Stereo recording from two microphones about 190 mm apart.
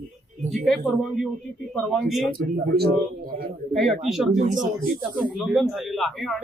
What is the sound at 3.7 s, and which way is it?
Speech, centre (ahead or behind).